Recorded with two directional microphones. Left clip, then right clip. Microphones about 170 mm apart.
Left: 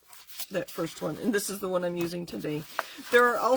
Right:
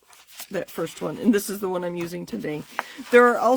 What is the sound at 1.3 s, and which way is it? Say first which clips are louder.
Speech: right 4 dB; 50° right (ahead or behind).